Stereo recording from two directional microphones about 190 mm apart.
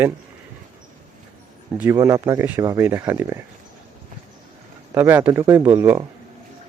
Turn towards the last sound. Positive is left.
turn(degrees=-15)  # may be behind; listen again after turning